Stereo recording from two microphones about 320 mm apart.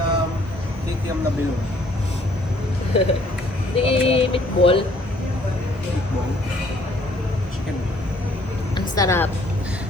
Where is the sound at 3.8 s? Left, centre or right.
Centre.